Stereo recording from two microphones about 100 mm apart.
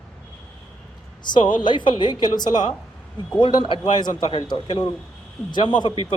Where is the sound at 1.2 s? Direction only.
50° left (ahead or behind).